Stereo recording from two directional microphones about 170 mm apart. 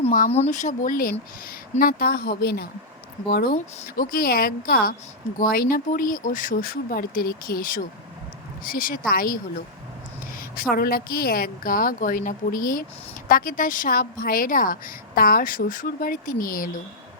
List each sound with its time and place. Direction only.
0.3 s a woman's voice: 40° left (ahead or behind); by 3.5 s 65° left (ahead or behind)
3.5 s a woman's voice: 55° left (ahead or behind)
10.5 s a woman's voice: 60° left (ahead or behind)